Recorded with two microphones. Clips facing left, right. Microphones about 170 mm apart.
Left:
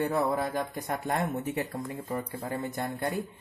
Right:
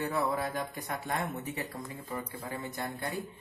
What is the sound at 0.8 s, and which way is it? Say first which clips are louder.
Speech: left 5 dB; 40° left (ahead or behind).